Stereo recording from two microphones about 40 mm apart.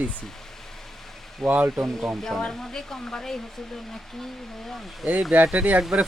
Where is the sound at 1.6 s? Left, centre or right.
Centre.